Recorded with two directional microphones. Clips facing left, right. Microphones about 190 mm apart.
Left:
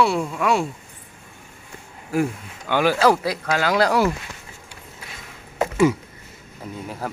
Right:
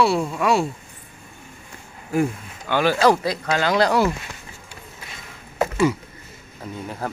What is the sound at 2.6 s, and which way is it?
Speech, 10° left (ahead or behind).